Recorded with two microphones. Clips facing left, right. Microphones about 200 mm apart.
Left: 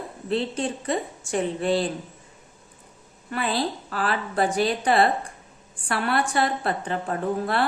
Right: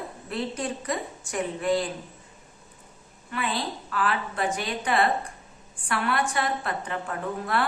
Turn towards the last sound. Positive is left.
turn(degrees=30)  # may be behind; listen again after turning